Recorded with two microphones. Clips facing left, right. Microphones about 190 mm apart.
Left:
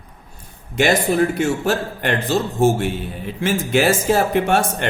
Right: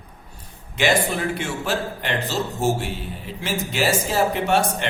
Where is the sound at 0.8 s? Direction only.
45° left (ahead or behind).